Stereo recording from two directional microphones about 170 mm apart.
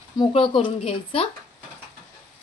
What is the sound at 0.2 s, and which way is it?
Speech, 30° left (ahead or behind).